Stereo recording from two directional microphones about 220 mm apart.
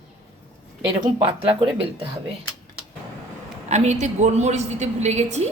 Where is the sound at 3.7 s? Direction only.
30° right (ahead or behind).